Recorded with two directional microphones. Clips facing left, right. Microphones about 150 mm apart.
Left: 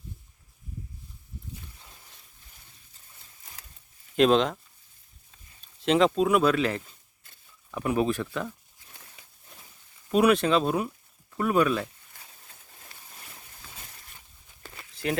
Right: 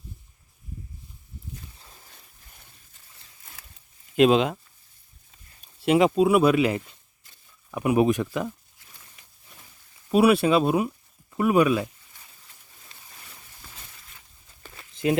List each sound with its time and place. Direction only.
4.1 s speech: 5° right (ahead or behind)
10.1 s speech: 5° right (ahead or behind)
14.9 s a sound: 20° right (ahead or behind)